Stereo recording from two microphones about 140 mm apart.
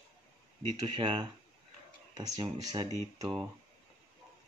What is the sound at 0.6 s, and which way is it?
Speech, 35° right (ahead or behind).